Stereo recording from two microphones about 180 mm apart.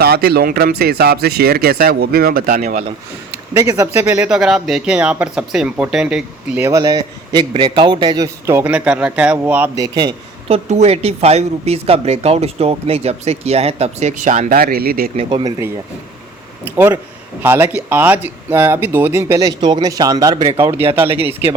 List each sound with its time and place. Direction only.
0.0 s speech: 60° right (ahead or behind); by 2.8 s 45° right (ahead or behind)
3.6 s speech: 15° right (ahead or behind)
6.7 s speech: 20° right (ahead or behind)
9.8 s speech: 25° right (ahead or behind)
10.7 s speech: 35° right (ahead or behind); by 15.1 s 55° right (ahead or behind)
15.1 s speech: 30° right (ahead or behind)
16.6 s speech: 10° right (ahead or behind)
20.7 s speech: 10° right (ahead or behind)